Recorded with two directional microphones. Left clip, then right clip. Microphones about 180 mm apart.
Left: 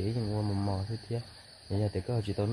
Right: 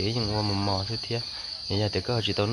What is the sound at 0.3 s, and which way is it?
Cricket, 30° right (ahead or behind).